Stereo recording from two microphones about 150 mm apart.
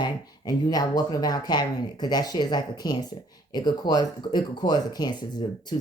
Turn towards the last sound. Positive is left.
turn(degrees=30)  # may be behind; listen again after turning